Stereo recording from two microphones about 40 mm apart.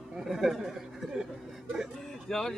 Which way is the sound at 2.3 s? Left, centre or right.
Centre.